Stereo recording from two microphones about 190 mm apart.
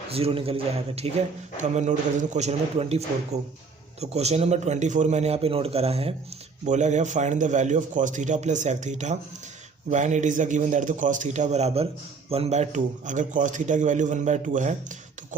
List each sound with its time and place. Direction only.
0.1 s a man's voice: 30° right (ahead or behind)